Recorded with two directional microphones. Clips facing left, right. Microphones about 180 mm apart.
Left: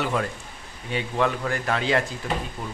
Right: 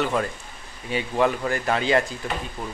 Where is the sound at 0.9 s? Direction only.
5° right (ahead or behind).